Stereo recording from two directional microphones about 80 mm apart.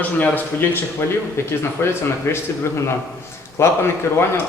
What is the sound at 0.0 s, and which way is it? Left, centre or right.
Speech, left.